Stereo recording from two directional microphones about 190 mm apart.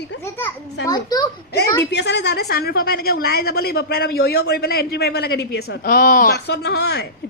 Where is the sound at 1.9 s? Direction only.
65° left (ahead or behind).